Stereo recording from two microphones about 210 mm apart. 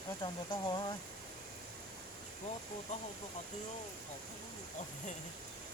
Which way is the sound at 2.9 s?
35° left (ahead or behind).